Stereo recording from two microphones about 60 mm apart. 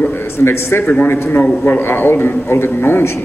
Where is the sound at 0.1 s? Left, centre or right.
Left.